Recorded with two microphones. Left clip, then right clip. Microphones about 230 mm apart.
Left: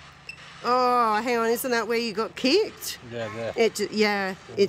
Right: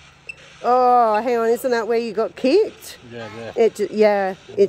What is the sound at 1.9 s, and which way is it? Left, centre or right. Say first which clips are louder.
Speech: right 6 dB; centre.